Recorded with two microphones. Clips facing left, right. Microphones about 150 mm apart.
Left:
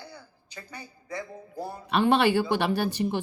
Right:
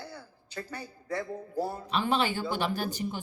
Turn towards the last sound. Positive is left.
turn(degrees=70)  # may be behind; listen again after turning